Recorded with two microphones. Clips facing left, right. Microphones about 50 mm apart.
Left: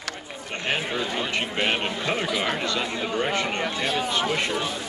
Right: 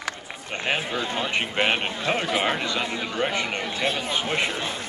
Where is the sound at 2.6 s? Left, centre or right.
Centre.